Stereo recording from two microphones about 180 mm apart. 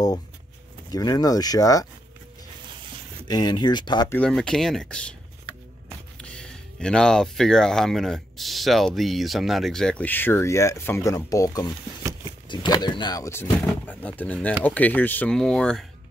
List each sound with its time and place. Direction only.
0.8 s speech: 20° left (ahead or behind)
3.3 s speech: 20° left (ahead or behind)
4.1 s speech: 5° left (ahead or behind)
6.1 s speech: 5° left (ahead or behind)
12.0 s a sound: 15° right (ahead or behind)
12.4 s speech: 25° left (ahead or behind); by 15.9 s 5° left (ahead or behind)